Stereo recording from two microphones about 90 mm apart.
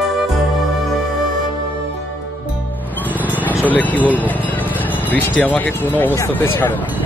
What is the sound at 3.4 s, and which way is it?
Speech, 20° left (ahead or behind).